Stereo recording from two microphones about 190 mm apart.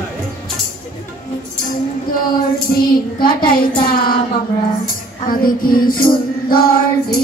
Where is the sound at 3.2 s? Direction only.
50° left (ahead or behind).